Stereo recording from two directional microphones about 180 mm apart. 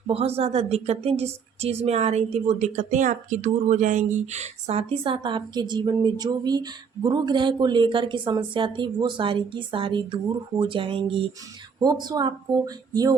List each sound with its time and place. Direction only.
0.1 s a woman's voice: 35° right (ahead or behind)